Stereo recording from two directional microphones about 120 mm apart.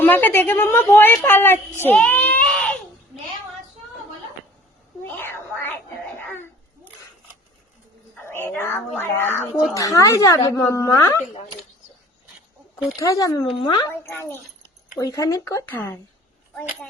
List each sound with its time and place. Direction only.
0.0 s a woman's voice: 15° left (ahead or behind)
2.0 s baby cry: 15° left (ahead or behind)
5.0 s a sound: 20° left (ahead or behind)
8.1 s a woman's voice: 20° left (ahead or behind)
13.0 s a woman's voice: 25° left (ahead or behind)
13.6 s a woman's voice: 40° left (ahead or behind)
13.8 s a woman's voice: 20° left (ahead or behind)
15.7 s a woman's voice: 15° left (ahead or behind)